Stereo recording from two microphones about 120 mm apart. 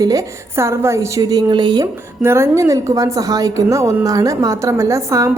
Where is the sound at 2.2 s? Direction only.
20° right (ahead or behind).